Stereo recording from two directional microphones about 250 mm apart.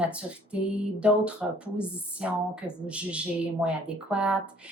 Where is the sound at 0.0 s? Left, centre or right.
Centre.